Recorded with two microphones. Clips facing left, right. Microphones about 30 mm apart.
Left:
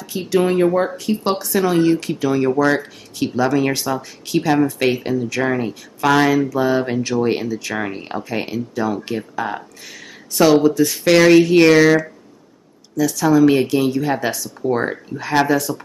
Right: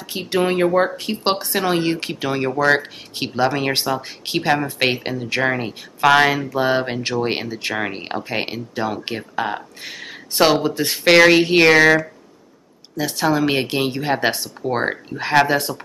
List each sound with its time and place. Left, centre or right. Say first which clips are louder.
0.4 s speech: left 1 dB; right
12.9 s speech: left 4 dB; right